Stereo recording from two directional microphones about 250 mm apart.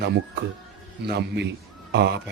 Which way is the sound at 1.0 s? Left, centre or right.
Right.